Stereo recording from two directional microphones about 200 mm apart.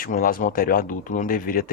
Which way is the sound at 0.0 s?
45° left (ahead or behind).